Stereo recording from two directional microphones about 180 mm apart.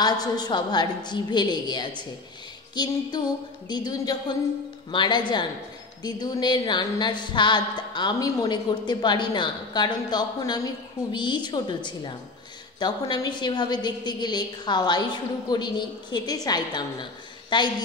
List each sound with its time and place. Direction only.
0.0 s a woman's voice: 20° left (ahead or behind)